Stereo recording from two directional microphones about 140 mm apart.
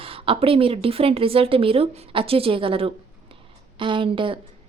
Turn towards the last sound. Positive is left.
turn(degrees=-40)  # may be behind; listen again after turning